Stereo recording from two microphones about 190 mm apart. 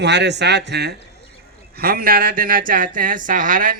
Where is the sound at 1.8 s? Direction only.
50° right (ahead or behind).